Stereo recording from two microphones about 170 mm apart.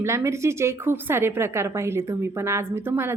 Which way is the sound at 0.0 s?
15° right (ahead or behind).